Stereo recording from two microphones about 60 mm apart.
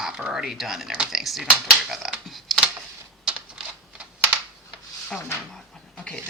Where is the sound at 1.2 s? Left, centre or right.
Centre.